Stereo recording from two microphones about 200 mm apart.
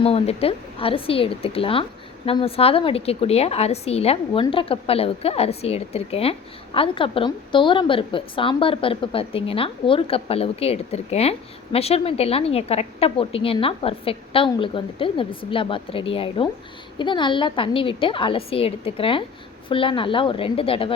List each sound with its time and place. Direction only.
0.0 s a woman's voice: 30° left (ahead or behind)